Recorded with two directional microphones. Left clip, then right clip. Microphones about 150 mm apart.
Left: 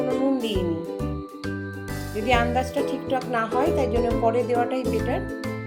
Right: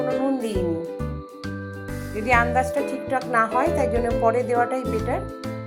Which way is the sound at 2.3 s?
5° left (ahead or behind).